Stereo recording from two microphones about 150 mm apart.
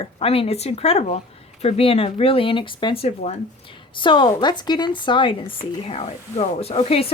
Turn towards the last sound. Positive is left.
turn(degrees=40)  # may be behind; listen again after turning